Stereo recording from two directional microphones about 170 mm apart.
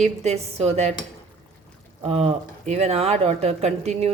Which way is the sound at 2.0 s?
35° right (ahead or behind).